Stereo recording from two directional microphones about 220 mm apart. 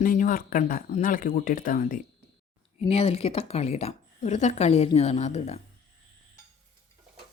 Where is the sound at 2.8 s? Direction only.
25° left (ahead or behind).